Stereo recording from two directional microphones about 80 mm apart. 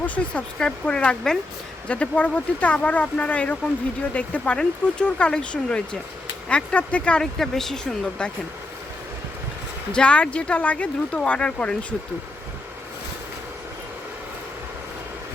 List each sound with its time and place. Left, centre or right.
0.0 s speech: centre
9.9 s speech: centre